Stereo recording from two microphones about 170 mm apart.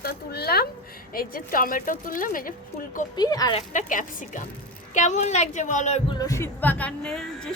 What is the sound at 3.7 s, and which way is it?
Speech, 50° left (ahead or behind).